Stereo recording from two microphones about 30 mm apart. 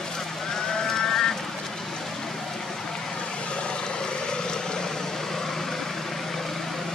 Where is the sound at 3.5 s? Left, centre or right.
Left; by 5.7 s centre.